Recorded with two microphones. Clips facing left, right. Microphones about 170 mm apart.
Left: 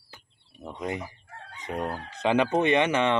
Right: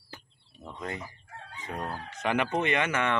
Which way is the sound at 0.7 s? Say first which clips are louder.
Left 5 dB; 15° left (ahead or behind).